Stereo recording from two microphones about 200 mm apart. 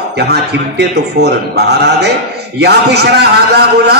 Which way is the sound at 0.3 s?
55° right (ahead or behind).